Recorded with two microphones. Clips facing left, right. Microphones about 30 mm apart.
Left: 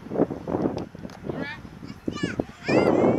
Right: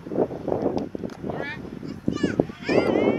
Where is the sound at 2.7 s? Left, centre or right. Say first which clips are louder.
Left 1 dB; centre.